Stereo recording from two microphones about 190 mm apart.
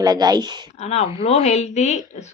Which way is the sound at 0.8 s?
35° left (ahead or behind).